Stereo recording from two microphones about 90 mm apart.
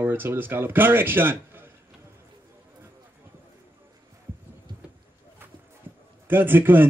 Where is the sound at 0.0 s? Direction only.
25° right (ahead or behind).